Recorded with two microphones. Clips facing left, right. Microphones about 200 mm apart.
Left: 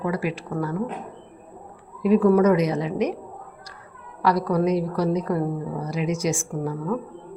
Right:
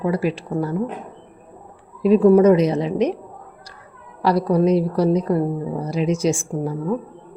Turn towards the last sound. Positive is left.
turn(degrees=-25)  # may be behind; listen again after turning